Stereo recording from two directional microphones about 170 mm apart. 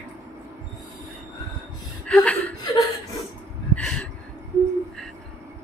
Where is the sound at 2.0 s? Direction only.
5° left (ahead or behind).